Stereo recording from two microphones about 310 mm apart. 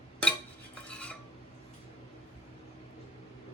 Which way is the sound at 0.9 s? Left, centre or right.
Centre.